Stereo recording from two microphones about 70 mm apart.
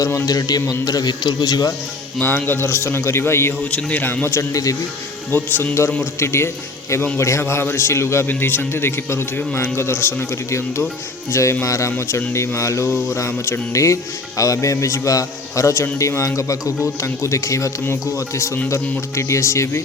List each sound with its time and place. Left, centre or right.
0.3 s speech: left
2.2 s speech: left
3.6 s a man's voice: centre
4.4 s speech: left
5.3 s a man's voice: left
6.1 s speech: left